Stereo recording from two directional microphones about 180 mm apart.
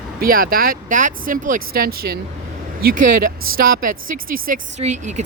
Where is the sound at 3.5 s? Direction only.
55° right (ahead or behind).